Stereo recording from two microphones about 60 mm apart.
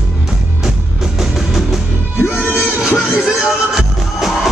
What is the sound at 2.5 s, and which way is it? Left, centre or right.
Music, left.